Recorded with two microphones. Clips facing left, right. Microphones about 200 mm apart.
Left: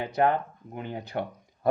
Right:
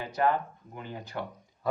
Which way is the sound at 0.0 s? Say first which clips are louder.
Left 3 dB; 60° left (ahead or behind).